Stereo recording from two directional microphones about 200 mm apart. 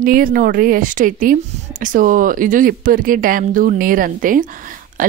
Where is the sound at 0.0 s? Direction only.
45° right (ahead or behind).